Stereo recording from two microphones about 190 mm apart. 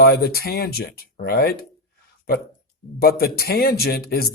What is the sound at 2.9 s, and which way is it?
Speech, 55° left (ahead or behind).